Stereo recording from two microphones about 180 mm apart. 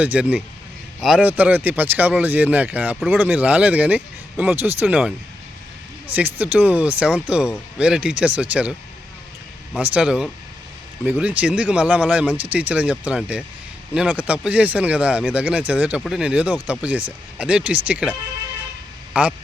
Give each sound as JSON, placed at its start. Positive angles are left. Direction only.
{"t": 0.0, "sound": "speech", "side_deg": -5}
{"t": 9.7, "sound": "speech", "side_deg": -5}